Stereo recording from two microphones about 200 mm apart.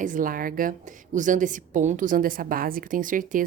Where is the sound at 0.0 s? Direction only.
40° right (ahead or behind).